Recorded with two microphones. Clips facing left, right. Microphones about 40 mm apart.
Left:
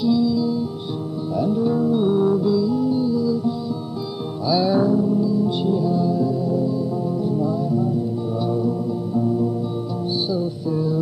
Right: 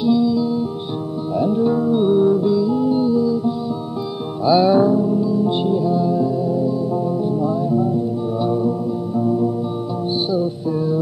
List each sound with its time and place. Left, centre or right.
0.0 s music: right
4.5 s music: right